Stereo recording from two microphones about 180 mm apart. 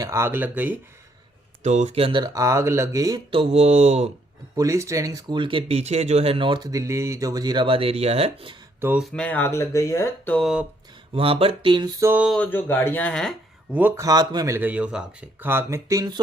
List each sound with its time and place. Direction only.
0.0 s a man's voice: 15° right (ahead or behind)
1.6 s speech: 40° right (ahead or behind); by 3.4 s 20° right (ahead or behind)
3.5 s speech: 35° right (ahead or behind)
4.5 s speech: 15° right (ahead or behind); by 8.5 s 35° right (ahead or behind)
8.8 s speech: 5° right (ahead or behind)
11.1 s speech: 30° right (ahead or behind); by 12.2 s 15° right (ahead or behind)
12.2 s speech: 5° left (ahead or behind)
13.7 s a man's voice: 10° right (ahead or behind)